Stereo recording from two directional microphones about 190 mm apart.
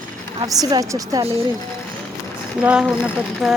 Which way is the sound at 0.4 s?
20° right (ahead or behind).